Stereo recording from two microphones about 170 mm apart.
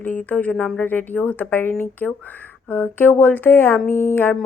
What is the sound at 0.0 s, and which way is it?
Speech, 10° left (ahead or behind).